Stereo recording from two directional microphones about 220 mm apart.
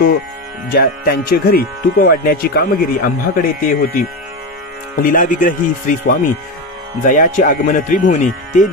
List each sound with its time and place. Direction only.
0.7 s speech: 45° left (ahead or behind)
5.0 s speech: 35° left (ahead or behind)